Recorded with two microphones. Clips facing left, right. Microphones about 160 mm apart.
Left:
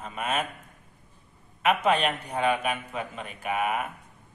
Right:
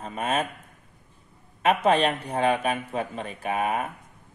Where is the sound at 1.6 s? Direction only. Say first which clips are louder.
Right 3 dB; 30° right (ahead or behind).